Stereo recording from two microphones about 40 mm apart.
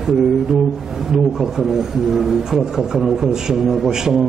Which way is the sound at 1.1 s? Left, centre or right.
Centre.